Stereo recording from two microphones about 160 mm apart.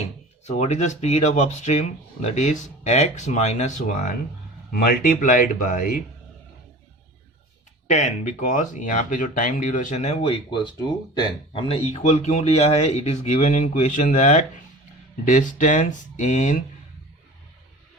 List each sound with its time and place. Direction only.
0.0 s speech: 45° left (ahead or behind)
4.7 s speech: 65° left (ahead or behind)
7.9 s speech: 45° left (ahead or behind)